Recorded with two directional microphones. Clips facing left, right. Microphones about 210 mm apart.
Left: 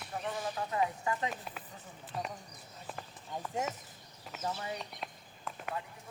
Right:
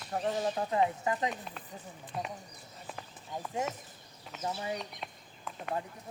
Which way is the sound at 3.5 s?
Centre (ahead or behind).